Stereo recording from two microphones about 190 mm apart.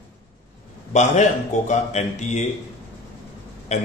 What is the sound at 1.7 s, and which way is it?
Speech, 35° left (ahead or behind).